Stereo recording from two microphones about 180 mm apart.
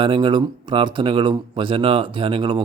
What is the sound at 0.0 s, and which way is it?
Speech, 25° right (ahead or behind).